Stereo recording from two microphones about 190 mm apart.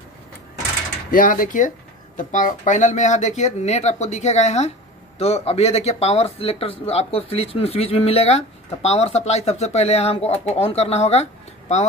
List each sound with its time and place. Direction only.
1.1 s speech: 45° left (ahead or behind)